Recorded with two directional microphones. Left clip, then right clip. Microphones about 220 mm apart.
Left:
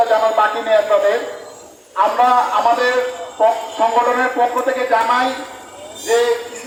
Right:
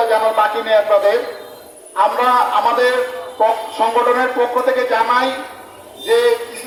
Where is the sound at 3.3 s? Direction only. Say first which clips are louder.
Even; 45° right (ahead or behind).